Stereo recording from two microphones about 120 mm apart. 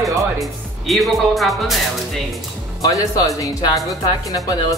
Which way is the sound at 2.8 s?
30° left (ahead or behind).